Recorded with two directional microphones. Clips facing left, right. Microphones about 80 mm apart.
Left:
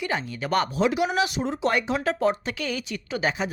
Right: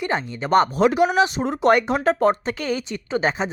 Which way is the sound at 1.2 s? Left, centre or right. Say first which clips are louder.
Right 5 dB; right.